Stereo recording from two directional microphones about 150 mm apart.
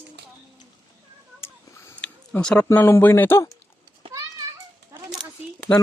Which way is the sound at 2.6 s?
15° left (ahead or behind).